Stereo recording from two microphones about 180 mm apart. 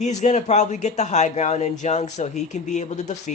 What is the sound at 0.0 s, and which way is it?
Speech, 40° left (ahead or behind).